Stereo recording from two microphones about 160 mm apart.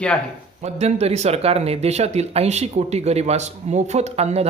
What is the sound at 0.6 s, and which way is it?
Speech, 40° right (ahead or behind).